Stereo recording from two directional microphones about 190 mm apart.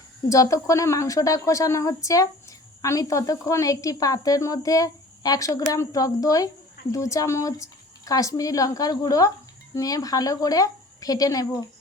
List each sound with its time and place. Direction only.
0.3 s a woman's voice: 15° left (ahead or behind)